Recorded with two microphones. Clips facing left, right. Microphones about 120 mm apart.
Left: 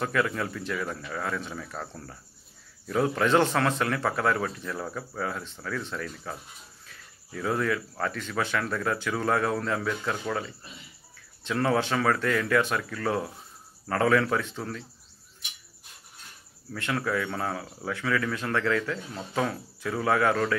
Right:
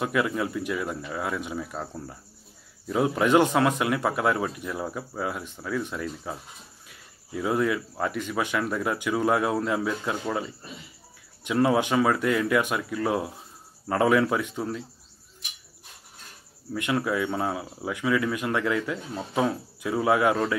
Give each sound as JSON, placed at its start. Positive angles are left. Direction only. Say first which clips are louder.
{"t": 0.0, "sound": "speech", "louder": "right 2 dB", "side_deg": -15}
{"t": 11.4, "sound": "speech", "louder": "right 3 dB", "side_deg": -15}
{"t": 16.7, "sound": "speech", "louder": "right 3 dB", "side_deg": -15}